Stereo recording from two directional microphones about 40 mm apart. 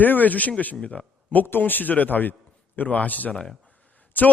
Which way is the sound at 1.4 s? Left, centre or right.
Left.